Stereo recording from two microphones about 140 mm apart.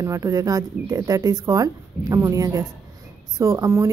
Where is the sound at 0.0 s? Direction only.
25° right (ahead or behind).